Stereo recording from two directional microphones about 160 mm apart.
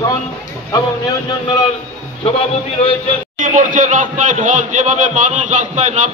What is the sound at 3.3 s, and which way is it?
A man's voice, 55° right (ahead or behind).